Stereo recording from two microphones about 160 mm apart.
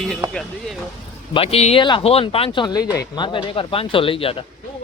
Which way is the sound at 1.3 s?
35° left (ahead or behind).